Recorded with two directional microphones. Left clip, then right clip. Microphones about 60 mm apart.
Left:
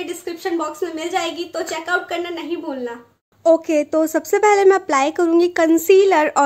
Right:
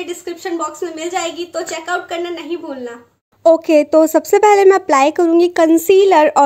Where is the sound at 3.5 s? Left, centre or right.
Right.